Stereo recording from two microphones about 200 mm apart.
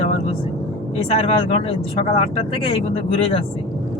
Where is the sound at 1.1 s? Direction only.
30° left (ahead or behind).